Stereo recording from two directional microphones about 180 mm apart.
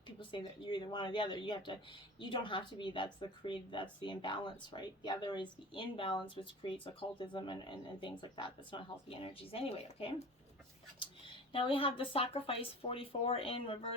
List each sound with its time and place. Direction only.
0.2 s a woman's voice: 25° left (ahead or behind)
11.5 s a woman's voice: 30° left (ahead or behind)